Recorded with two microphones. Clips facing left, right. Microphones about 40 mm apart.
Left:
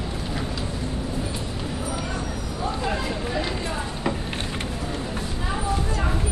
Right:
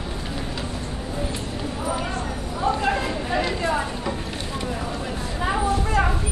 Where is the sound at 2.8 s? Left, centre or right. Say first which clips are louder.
Right 3 dB; right.